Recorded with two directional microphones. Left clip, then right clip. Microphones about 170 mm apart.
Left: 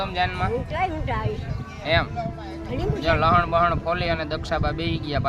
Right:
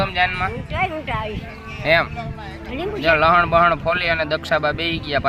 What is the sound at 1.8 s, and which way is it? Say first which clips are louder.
Speech: right 5 dB; 45° right (ahead or behind).